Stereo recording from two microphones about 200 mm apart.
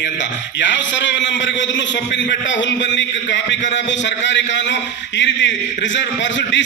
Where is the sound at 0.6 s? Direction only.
65° left (ahead or behind).